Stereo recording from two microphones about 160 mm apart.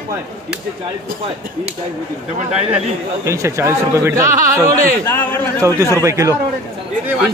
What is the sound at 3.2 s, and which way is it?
A man's voice, 20° right (ahead or behind).